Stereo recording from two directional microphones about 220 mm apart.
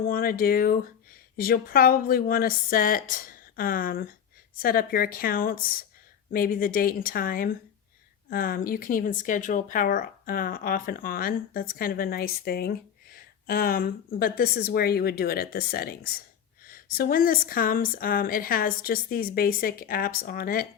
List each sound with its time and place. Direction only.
0.0 s a woman's voice: 40° left (ahead or behind)